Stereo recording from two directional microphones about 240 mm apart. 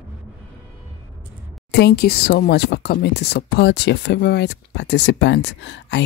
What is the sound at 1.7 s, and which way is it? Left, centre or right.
Speech, left.